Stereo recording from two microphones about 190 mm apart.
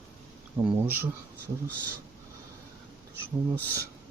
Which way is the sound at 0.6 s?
10° right (ahead or behind).